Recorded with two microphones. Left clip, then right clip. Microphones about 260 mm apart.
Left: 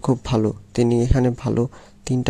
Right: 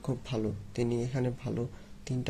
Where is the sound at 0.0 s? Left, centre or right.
Left.